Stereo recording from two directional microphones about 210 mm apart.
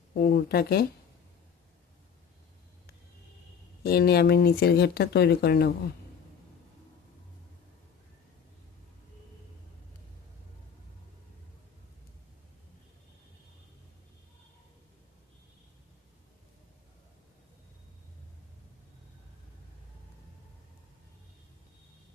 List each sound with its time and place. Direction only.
0.1 s speech: 45° left (ahead or behind)
3.8 s speech: 50° left (ahead or behind)